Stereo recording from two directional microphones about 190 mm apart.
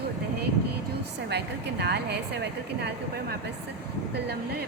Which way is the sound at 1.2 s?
60° right (ahead or behind).